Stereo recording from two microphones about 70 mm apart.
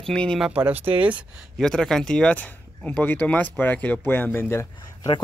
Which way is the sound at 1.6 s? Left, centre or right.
Centre.